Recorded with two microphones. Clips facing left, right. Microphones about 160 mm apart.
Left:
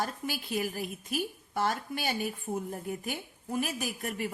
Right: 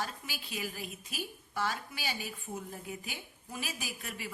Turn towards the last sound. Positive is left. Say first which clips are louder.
# left 8 dB
turn(degrees=50)  # may be behind; listen again after turning